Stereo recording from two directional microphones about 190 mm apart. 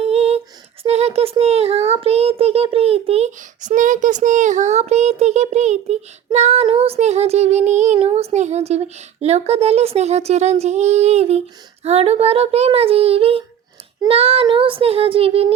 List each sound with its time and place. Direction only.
0.0 s child singing: 35° right (ahead or behind)
1.9 s a child's voice: 30° right (ahead or behind)
14.1 s child singing: 30° right (ahead or behind)